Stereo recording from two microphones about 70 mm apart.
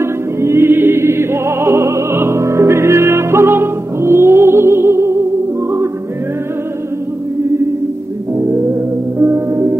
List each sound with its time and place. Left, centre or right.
0.0 s music: right
8.4 s music: right